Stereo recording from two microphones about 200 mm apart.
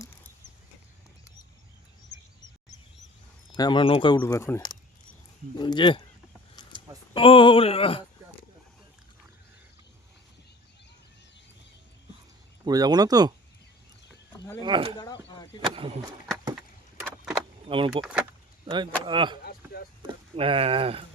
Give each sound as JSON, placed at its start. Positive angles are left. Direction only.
{"t": 3.5, "sound": "speech", "side_deg": 20}
{"t": 4.2, "sound": "speech", "side_deg": 15}
{"t": 7.1, "sound": "speech", "side_deg": 25}
{"t": 12.6, "sound": "speech", "side_deg": -20}
{"t": 14.6, "sound": "speech", "side_deg": -25}
{"t": 14.9, "sound": "a sound", "side_deg": 20}
{"t": 15.6, "sound": "speech", "side_deg": -25}
{"t": 17.7, "sound": "speech", "side_deg": -25}
{"t": 18.0, "sound": "speech", "side_deg": -5}
{"t": 18.6, "sound": "speech", "side_deg": -25}
{"t": 19.4, "sound": "a sound", "side_deg": 50}
{"t": 20.0, "sound": "speech", "side_deg": -25}